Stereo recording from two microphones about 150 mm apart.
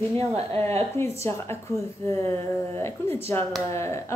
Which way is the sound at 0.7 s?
15° left (ahead or behind).